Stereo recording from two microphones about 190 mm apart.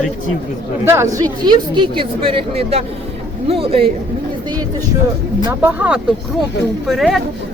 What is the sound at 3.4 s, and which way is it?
Speech, 30° right (ahead or behind).